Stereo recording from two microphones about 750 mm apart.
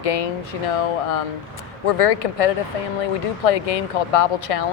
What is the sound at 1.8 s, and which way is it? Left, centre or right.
Speech, left.